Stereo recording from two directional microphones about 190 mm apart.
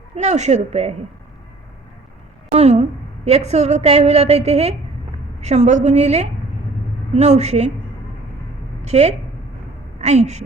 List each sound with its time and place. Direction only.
0.2 s a woman's voice: 35° right (ahead or behind)
2.5 s a woman's voice: 35° right (ahead or behind)
8.8 s a woman's voice: 35° right (ahead or behind)